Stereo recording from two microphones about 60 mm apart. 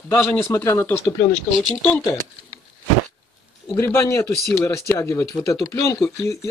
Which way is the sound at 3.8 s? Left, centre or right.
Left.